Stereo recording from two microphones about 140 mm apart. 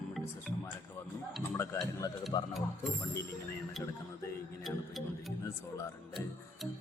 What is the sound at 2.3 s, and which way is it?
Speech, 30° left (ahead or behind).